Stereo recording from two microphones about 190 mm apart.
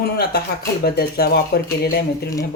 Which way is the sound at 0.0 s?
55° left (ahead or behind).